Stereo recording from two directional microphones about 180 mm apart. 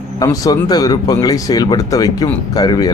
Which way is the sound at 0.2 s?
20° left (ahead or behind).